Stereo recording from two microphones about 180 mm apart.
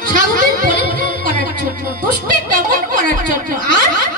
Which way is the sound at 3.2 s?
50° right (ahead or behind).